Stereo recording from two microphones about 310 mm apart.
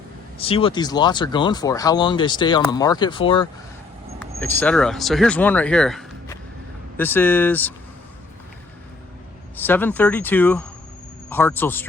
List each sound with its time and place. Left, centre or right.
0.3 s speech: centre
4.4 s speech: centre
9.6 s speech: centre